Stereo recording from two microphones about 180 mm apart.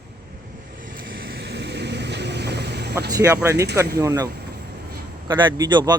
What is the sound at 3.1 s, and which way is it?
Speech, 20° right (ahead or behind).